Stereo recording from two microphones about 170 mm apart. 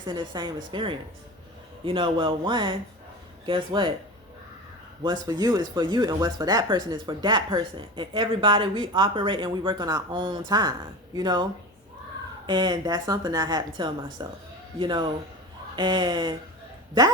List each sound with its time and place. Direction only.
0.0 s speech: 25° right (ahead or behind)
5.0 s speech: 25° right (ahead or behind)
12.5 s speech: 25° right (ahead or behind)